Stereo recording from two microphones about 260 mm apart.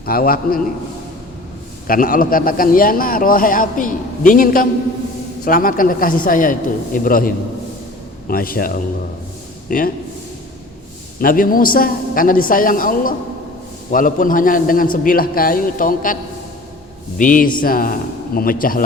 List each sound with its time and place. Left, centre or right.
0.0 s a man's voice: left
1.9 s a man's voice: left
11.2 s a man's voice: left
17.2 s a man's voice: left